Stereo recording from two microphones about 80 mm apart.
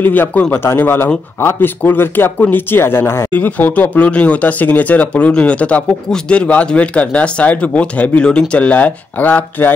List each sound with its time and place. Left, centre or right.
0.0 s speech: left